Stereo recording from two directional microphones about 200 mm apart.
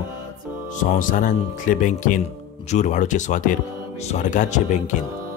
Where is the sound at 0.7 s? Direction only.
40° left (ahead or behind).